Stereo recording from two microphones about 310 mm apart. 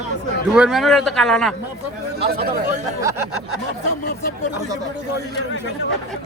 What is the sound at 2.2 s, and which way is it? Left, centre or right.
Speech, right.